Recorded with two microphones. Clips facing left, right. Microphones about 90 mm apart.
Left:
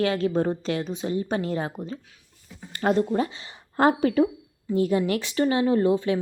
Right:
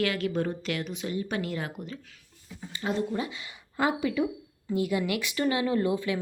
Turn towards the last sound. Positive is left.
turn(degrees=35)  # may be behind; listen again after turning